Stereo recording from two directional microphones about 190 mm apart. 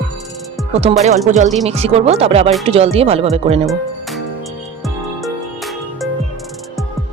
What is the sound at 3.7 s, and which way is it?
Music, centre (ahead or behind).